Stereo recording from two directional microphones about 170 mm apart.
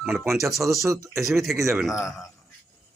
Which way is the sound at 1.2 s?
Centre (ahead or behind).